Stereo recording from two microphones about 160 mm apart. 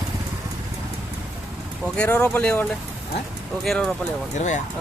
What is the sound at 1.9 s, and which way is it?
Speech, 5° left (ahead or behind).